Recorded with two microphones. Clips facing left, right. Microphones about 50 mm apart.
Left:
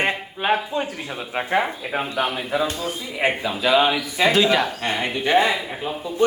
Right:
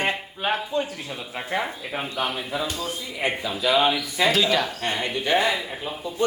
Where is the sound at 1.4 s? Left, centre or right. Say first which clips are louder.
Left 6 dB; left.